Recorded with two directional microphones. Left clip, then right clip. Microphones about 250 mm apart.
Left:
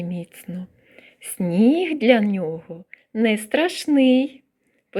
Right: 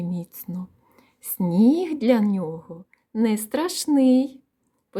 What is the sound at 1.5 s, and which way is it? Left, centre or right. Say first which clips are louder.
A woman's voice: left 2 dB; centre.